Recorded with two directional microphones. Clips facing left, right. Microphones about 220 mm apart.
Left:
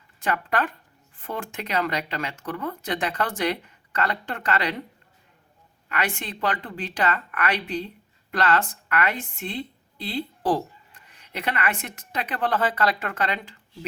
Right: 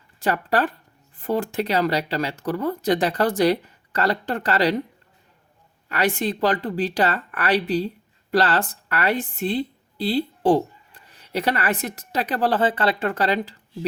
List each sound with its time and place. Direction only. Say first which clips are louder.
0.2 s speech: right 4 dB; 35° right (ahead or behind)
5.9 s a woman's voice: right 7 dB; 35° right (ahead or behind)